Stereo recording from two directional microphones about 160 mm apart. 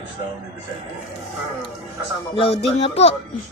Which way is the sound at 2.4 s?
40° left (ahead or behind).